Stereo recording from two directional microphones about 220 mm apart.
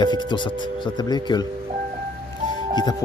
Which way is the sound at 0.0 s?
20° left (ahead or behind).